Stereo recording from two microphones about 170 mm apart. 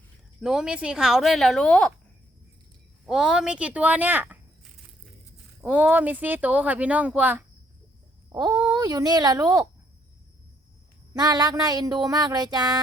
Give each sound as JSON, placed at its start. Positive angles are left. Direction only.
{"t": 0.4, "sound": "a woman's voice", "side_deg": -5}
{"t": 3.1, "sound": "speech", "side_deg": -5}
{"t": 5.6, "sound": "speech", "side_deg": -10}
{"t": 8.3, "sound": "speech", "side_deg": -25}
{"t": 11.1, "sound": "speech", "side_deg": -25}